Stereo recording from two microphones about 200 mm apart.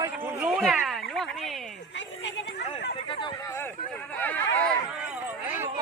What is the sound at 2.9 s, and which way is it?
Speech, 25° left (ahead or behind).